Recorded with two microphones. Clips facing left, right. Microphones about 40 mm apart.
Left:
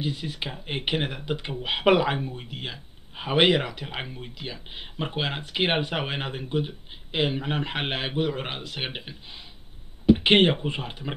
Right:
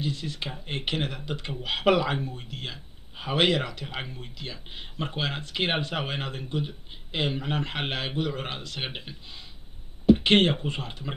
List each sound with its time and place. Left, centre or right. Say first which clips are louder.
0.0 s speech: left 1 dB; centre
10.2 s speech: left 2 dB; centre